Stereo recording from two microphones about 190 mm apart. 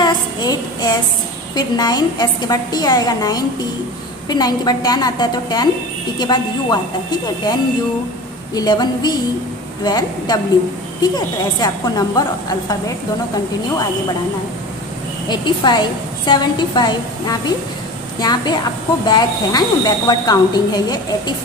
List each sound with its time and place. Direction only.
0.0 s a sound: 20° left (ahead or behind)
1.5 s speech: 20° left (ahead or behind)
8.5 s speech: 20° left (ahead or behind)
15.2 s speech: 25° left (ahead or behind)